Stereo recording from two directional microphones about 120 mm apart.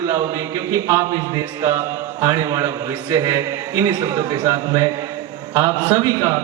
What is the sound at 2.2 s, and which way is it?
A man's voice, 30° right (ahead or behind).